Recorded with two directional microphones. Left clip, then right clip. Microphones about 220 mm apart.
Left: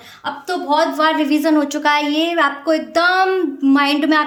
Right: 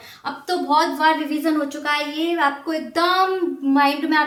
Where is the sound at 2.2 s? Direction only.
60° left (ahead or behind).